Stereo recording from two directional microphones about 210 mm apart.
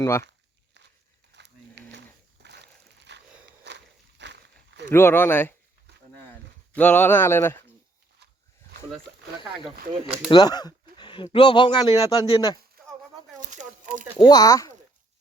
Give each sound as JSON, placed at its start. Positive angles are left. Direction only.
{"t": 0.0, "sound": "speech", "side_deg": 15}
{"t": 1.3, "sound": "a sound", "side_deg": -55}
{"t": 4.9, "sound": "speech", "side_deg": 10}
{"t": 6.7, "sound": "speech", "side_deg": 10}
{"t": 9.6, "sound": "speech", "side_deg": -25}
{"t": 10.2, "sound": "speech", "side_deg": 20}
{"t": 12.8, "sound": "a sound", "side_deg": -45}
{"t": 13.5, "sound": "speech", "side_deg": -35}
{"t": 14.2, "sound": "speech", "side_deg": 20}